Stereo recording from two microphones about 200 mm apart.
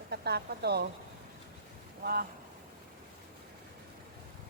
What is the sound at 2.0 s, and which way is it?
Speech, 50° right (ahead or behind).